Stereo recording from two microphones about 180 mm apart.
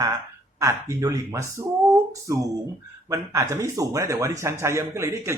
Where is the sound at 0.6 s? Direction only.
20° right (ahead or behind).